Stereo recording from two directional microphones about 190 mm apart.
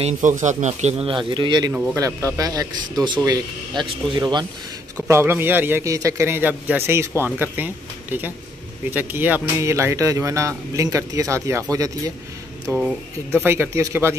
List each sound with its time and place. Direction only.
0.0 s a man's voice: 40° right (ahead or behind); by 4.5 s 20° right (ahead or behind)
5.0 s a man's voice: 10° right (ahead or behind)